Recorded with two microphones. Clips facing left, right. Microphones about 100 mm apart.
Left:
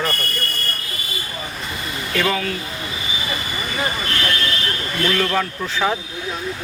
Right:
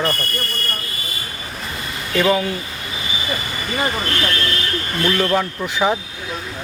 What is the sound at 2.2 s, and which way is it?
Speech, 15° right (ahead or behind).